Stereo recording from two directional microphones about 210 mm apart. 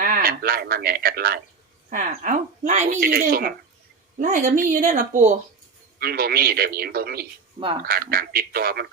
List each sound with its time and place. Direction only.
0.0 s a man's voice: 45° right (ahead or behind)